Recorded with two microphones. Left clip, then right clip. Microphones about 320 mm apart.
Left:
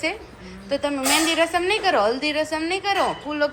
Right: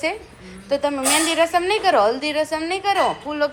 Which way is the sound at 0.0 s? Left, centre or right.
Centre.